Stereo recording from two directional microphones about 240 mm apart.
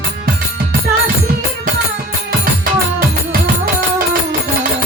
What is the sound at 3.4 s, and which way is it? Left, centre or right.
Music, right.